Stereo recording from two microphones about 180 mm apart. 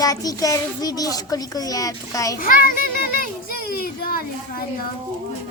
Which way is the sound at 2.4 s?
50° left (ahead or behind).